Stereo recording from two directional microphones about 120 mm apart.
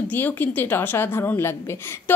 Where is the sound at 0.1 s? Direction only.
15° left (ahead or behind).